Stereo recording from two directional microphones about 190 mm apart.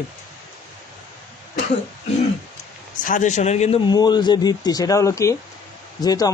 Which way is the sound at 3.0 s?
40° left (ahead or behind).